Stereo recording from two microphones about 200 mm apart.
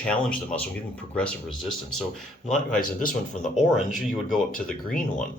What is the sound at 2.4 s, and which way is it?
Speech, 5° left (ahead or behind).